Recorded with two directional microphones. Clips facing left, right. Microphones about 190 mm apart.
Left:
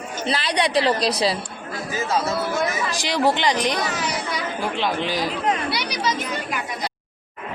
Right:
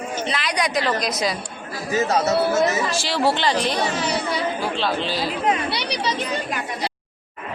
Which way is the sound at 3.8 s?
30° right (ahead or behind).